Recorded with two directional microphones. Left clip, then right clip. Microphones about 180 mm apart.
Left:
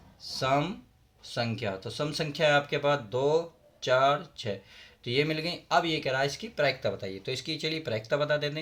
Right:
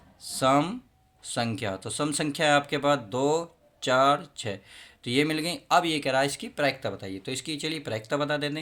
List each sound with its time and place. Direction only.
0.3 s speech: 45° right (ahead or behind)